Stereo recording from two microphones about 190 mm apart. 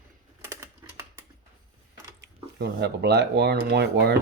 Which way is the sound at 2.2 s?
60° right (ahead or behind).